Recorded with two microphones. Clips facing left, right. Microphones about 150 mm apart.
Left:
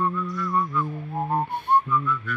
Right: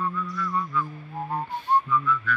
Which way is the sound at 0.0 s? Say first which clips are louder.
Left 3 dB; 45° left (ahead or behind).